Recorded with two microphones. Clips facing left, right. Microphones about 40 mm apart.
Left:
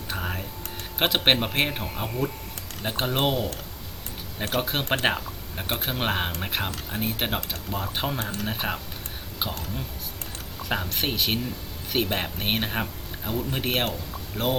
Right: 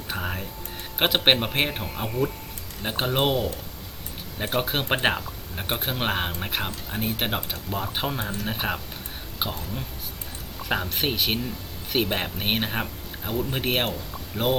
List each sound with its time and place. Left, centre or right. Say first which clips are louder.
0.1 s music: right 1 dB; centre
0.9 s a man's voice: right 1 dB; centre
10.6 s speech: right 2 dB; centre